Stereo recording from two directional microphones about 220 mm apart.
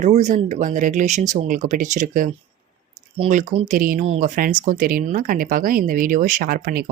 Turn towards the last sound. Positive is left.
turn(degrees=-40)  # may be behind; listen again after turning